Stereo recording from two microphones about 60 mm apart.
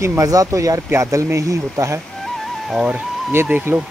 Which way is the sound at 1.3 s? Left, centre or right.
Right.